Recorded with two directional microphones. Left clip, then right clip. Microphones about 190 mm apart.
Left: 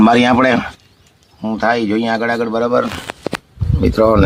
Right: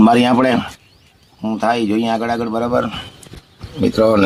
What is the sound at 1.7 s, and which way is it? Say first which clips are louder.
Speech: even; 20° left (ahead or behind).